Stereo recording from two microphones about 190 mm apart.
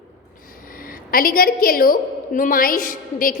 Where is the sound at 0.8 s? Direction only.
50° left (ahead or behind).